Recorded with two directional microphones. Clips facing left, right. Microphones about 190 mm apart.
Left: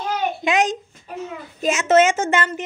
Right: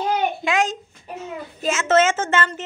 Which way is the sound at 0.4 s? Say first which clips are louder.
Left 2 dB; 20° left (ahead or behind).